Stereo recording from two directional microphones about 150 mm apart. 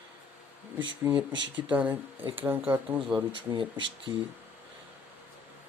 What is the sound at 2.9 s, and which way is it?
Speech, 35° right (ahead or behind).